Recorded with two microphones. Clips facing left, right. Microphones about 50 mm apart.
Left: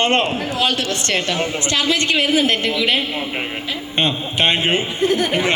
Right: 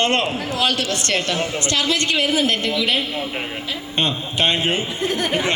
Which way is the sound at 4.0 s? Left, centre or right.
Left.